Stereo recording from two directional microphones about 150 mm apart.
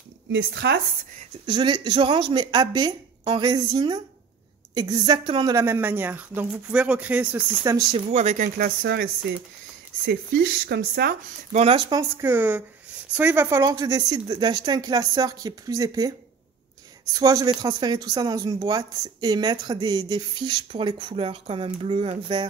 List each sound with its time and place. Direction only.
1.4 s a woman's voice: 30° right (ahead or behind); by 7.4 s 10° right (ahead or behind)
7.9 s speech: 50° right (ahead or behind)
8.5 s speech: 85° right
11.5 s speech: 40° right (ahead or behind)
11.9 s a woman's voice: 20° right (ahead or behind)
17.2 s speech: 25° right (ahead or behind)